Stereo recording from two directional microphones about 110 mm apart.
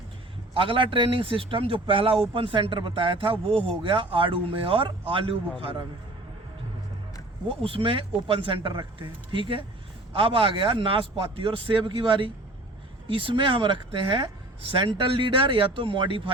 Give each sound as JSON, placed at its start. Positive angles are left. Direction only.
{"t": 0.5, "sound": "speech", "side_deg": -50}
{"t": 7.4, "sound": "speech", "side_deg": -55}